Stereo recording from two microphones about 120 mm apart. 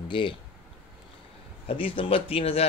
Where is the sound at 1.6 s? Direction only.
50° left (ahead or behind).